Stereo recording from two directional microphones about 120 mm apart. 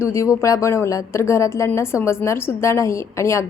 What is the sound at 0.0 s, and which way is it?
Speech, 25° left (ahead or behind).